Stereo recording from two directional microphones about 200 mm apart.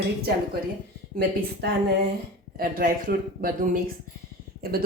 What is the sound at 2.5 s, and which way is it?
Speech, 45° right (ahead or behind).